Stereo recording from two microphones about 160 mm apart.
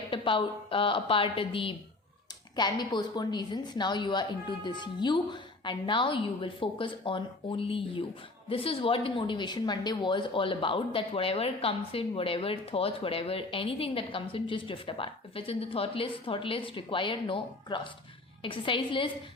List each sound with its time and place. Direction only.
0.1 s a woman's voice: 30° left (ahead or behind)